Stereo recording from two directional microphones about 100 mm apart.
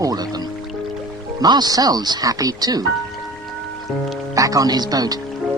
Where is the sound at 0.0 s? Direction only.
40° right (ahead or behind).